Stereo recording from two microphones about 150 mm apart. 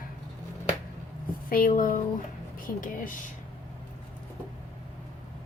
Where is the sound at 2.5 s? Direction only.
65° left (ahead or behind).